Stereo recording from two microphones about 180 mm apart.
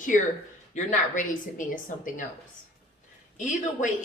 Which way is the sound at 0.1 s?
45° left (ahead or behind).